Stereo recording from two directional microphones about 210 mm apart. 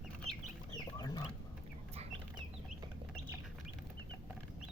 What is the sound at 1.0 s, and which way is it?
Chicken, 20° left (ahead or behind).